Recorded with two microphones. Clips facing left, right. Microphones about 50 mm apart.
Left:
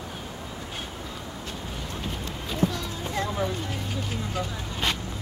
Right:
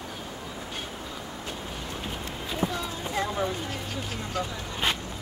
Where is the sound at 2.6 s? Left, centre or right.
Centre.